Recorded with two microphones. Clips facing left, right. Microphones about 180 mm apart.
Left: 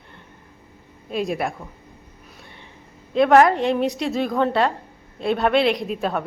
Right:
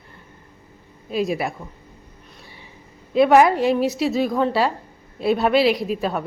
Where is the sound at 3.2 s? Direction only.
5° right (ahead or behind).